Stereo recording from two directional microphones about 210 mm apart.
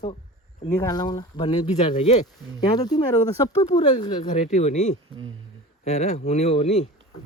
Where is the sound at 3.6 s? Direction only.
30° left (ahead or behind).